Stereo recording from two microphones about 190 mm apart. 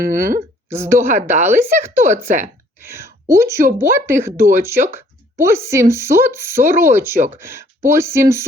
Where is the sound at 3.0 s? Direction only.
15° right (ahead or behind).